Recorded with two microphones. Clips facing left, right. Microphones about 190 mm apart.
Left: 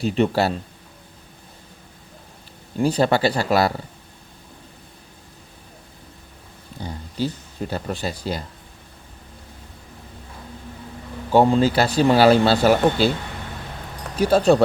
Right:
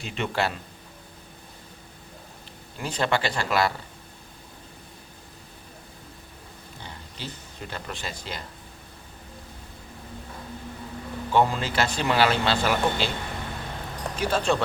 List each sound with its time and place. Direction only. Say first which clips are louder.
0.0 s speech: left 8 dB; 35° left (ahead or behind)
2.7 s speech: left 8 dB; 35° left (ahead or behind)
6.8 s speech: left 13 dB; 40° left (ahead or behind)
11.3 s speech: left 7 dB; 35° left (ahead or behind)
14.2 s speech: left 9 dB; 35° left (ahead or behind)